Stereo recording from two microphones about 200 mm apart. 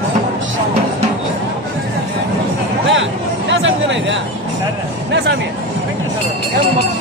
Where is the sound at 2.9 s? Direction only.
70° right (ahead or behind).